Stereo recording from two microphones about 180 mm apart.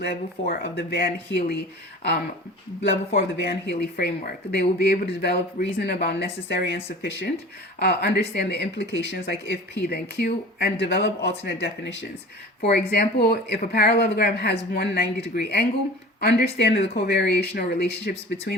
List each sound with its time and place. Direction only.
0.0 s speech: 55° left (ahead or behind)
3.2 s speech: 60° left (ahead or behind)